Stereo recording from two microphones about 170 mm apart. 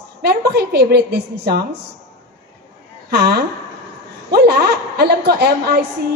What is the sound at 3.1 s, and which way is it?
A woman's voice, 70° right (ahead or behind).